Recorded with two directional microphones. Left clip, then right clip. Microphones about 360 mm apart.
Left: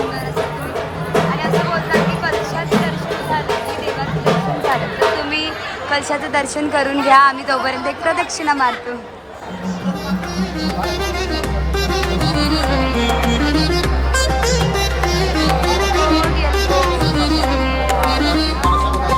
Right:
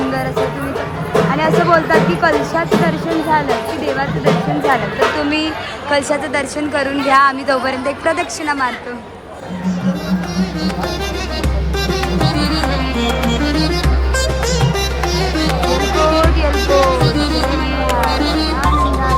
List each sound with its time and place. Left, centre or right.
1.1 s speech: centre
5.9 s a woman's voice: centre
9.6 s music: centre
11.9 s music: centre